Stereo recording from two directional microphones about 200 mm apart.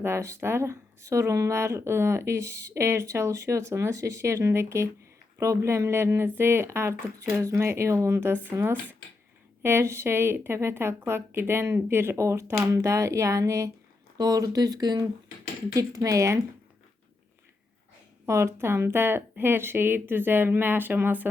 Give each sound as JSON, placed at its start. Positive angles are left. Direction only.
{"t": 0.0, "sound": "speech", "side_deg": -15}
{"t": 18.3, "sound": "speech", "side_deg": -15}